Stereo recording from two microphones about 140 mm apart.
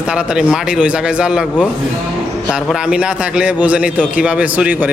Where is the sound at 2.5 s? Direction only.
5° right (ahead or behind).